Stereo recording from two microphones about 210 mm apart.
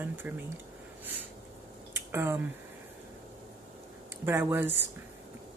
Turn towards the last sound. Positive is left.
turn(degrees=-10)  # may be behind; listen again after turning